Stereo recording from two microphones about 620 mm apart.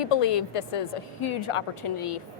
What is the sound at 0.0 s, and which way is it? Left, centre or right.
A woman's voice, left.